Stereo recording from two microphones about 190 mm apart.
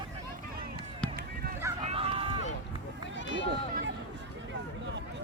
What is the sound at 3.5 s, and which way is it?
Run, 60° right (ahead or behind).